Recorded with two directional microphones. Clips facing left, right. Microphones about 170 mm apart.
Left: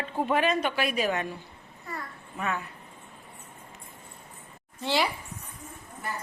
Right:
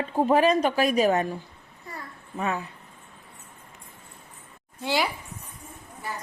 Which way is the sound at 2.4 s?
30° right (ahead or behind).